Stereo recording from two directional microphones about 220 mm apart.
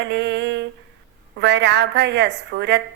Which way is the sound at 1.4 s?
50° right (ahead or behind).